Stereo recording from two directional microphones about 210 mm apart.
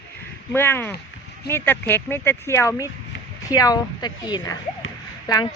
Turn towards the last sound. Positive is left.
turn(degrees=20)  # may be behind; listen again after turning